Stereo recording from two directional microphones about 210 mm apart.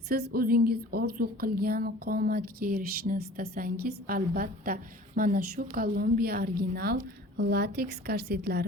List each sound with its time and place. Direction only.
0.1 s a woman's voice: 50° right (ahead or behind)